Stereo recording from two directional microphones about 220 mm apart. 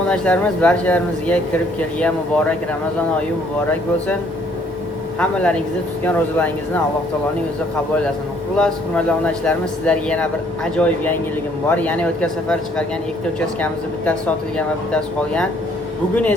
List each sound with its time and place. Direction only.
0.1 s speech: 5° left (ahead or behind)
5.2 s speech: 5° left (ahead or behind)
8.5 s speech: 5° left (ahead or behind)